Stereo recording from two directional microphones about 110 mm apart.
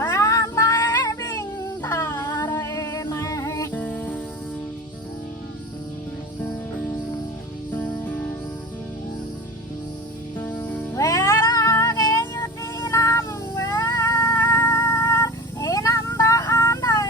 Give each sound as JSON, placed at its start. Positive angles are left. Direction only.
{"t": 0.0, "sound": "female singing", "side_deg": 25}
{"t": 3.7, "sound": "music", "side_deg": 15}
{"t": 7.8, "sound": "music", "side_deg": 15}
{"t": 10.4, "sound": "music", "side_deg": 15}
{"t": 10.9, "sound": "cat", "side_deg": 30}
{"t": 14.3, "sound": "a sound", "side_deg": 20}